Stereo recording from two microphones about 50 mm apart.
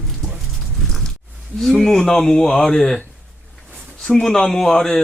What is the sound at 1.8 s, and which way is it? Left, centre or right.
Speech, centre.